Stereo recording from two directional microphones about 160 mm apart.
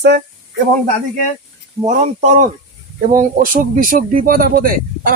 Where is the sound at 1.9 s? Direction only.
50° right (ahead or behind); by 5.1 s 65° right (ahead or behind).